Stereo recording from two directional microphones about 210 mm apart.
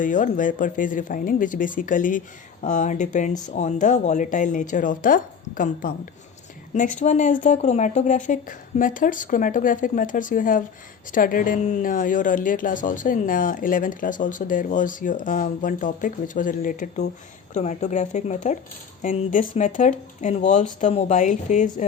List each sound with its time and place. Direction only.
0.0 s speech: 40° left (ahead or behind)